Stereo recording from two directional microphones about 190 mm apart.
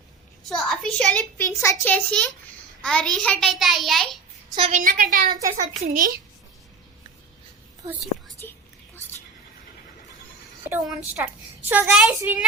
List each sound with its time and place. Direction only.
0.4 s a child's voice: centre (ahead or behind)
4.5 s a woman's voice: 30° right (ahead or behind)
4.8 s a woman's voice: 45° right (ahead or behind)
8.4 s speech: 10° left (ahead or behind)
10.6 s a sound: 10° right (ahead or behind)
11.7 s a woman's voice: 10° right (ahead or behind)